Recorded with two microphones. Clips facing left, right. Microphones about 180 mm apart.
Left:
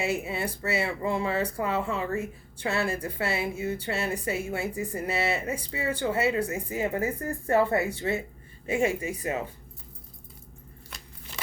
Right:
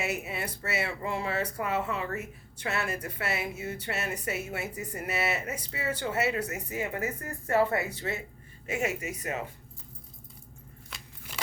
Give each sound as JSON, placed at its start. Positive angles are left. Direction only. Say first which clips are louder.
{"t": 0.0, "sound": "speech", "louder": "left 4 dB", "side_deg": 30}
{"t": 10.9, "sound": "keys jangling", "louder": "even", "side_deg": 0}